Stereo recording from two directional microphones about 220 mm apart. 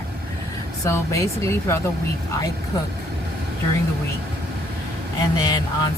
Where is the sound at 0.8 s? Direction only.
15° left (ahead or behind).